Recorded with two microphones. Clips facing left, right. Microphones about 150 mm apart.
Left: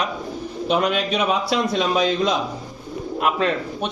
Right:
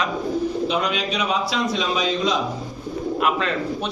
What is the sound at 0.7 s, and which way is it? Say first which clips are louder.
A man's voice: left 3 dB; 50° left (ahead or behind).